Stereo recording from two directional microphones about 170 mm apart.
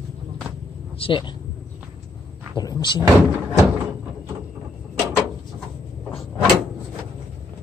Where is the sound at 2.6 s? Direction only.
25° left (ahead or behind).